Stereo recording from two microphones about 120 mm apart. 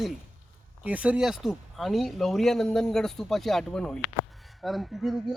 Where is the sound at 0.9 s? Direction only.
10° right (ahead or behind).